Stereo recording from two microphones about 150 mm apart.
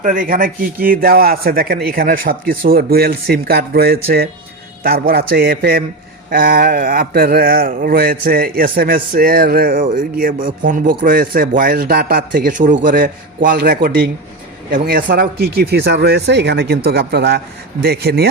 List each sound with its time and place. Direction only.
0.0 s speech: 60° right (ahead or behind); by 5.8 s 90° right
6.3 s a man's voice: 75° right (ahead or behind); by 18.3 s 90° right